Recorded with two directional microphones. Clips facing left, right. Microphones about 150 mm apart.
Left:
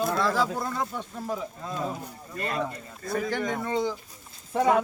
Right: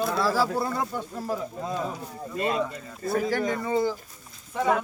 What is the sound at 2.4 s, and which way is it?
Speech, 25° right (ahead or behind).